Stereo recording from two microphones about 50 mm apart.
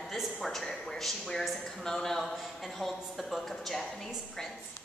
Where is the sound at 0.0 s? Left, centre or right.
Centre.